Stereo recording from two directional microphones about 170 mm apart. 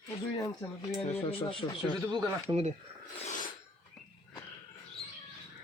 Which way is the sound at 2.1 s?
25° right (ahead or behind).